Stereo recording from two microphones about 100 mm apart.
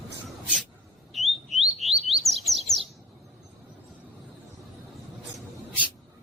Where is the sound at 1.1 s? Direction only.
Centre (ahead or behind).